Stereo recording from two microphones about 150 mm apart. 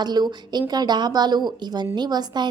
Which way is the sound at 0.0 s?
25° right (ahead or behind).